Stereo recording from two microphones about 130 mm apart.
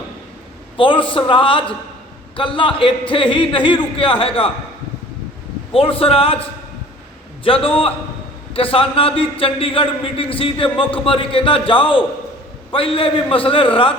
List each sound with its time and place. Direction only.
0.8 s a man's voice: 40° left (ahead or behind)
5.7 s speech: 45° left (ahead or behind)
7.4 s speech: 45° left (ahead or behind)